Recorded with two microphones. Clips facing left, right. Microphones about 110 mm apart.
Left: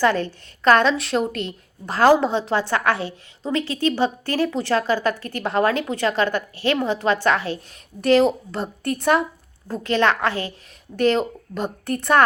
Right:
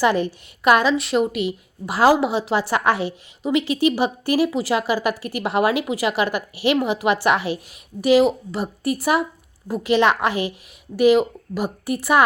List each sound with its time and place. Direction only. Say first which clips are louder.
0.0 s a woman's voice: right 1 dB; 15° right (ahead or behind)